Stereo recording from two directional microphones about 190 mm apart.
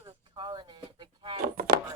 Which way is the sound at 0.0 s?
25° right (ahead or behind).